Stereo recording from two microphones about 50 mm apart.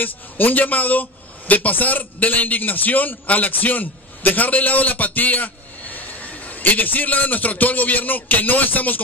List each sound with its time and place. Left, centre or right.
0.0 s a man's voice: left